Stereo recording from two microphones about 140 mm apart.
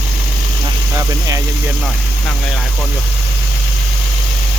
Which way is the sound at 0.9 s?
20° right (ahead or behind).